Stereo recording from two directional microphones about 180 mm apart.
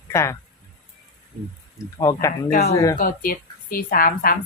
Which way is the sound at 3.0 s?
55° left (ahead or behind).